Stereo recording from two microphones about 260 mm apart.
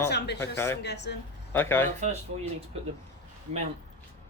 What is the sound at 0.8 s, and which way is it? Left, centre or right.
Speech, left.